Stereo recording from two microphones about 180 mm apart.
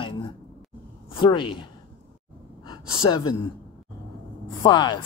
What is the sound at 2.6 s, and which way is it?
Gasp, 25° left (ahead or behind).